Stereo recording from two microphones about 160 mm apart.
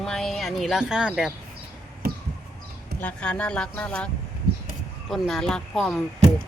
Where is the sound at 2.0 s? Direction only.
65° right (ahead or behind).